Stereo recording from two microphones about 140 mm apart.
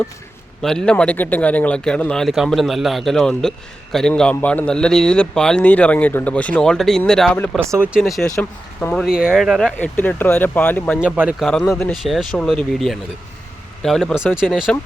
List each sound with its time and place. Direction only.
0.6 s a man's voice: 5° left (ahead or behind)
7.6 s speech: 20° right (ahead or behind)
7.9 s a man's voice: centre (ahead or behind)
9.2 s a man's voice: 5° right (ahead or behind)
11.0 s speech: 10° right (ahead or behind)